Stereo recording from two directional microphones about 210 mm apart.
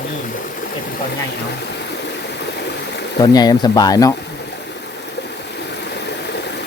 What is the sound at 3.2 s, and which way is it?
Speech, 20° left (ahead or behind).